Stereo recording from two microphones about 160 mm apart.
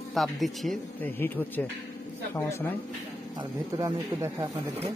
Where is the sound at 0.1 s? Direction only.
Centre (ahead or behind).